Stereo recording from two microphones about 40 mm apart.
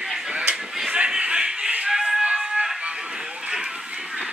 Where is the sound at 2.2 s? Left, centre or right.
Right.